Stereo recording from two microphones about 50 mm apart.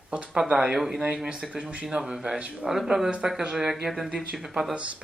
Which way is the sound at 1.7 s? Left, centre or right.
Right.